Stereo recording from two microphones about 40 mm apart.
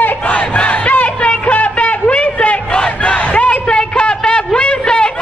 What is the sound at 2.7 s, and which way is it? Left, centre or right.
Crowd, left.